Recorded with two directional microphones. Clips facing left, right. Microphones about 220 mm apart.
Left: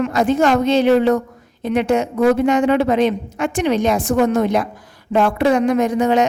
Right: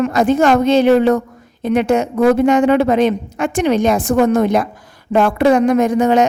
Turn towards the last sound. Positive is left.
turn(degrees=-45)  # may be behind; listen again after turning